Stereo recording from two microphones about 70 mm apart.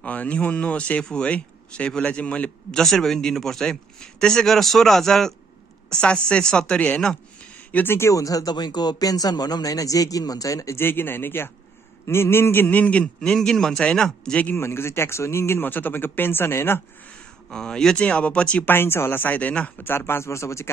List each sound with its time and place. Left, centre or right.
0.0 s speech: left
2.8 s a man's voice: centre
7.7 s speech: left
8.1 s speech: left
10.8 s speech: left
13.0 s speech: centre
14.6 s speech: left
17.5 s speech: centre
18.7 s speech: left
19.9 s speech: left